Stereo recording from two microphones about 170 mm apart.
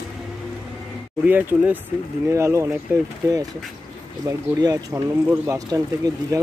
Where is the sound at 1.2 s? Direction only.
10° right (ahead or behind).